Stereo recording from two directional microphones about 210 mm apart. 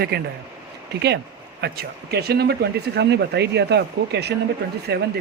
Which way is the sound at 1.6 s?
50° right (ahead or behind).